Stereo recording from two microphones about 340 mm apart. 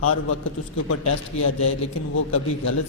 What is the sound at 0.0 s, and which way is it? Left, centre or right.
A man's voice, left.